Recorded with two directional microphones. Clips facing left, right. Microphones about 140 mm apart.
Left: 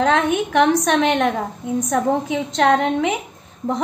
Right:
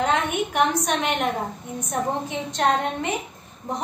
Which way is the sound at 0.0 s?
90° left.